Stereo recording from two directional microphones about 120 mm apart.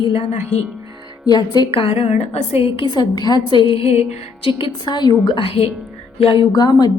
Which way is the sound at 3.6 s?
55° left (ahead or behind).